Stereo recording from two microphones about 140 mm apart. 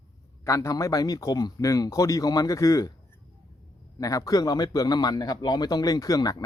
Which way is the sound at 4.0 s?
25° left (ahead or behind).